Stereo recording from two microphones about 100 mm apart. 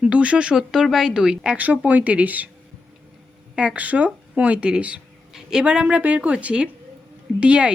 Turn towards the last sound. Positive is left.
turn(degrees=-10)  # may be behind; listen again after turning